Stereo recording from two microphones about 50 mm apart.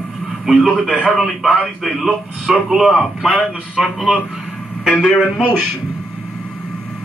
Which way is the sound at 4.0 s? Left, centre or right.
Centre.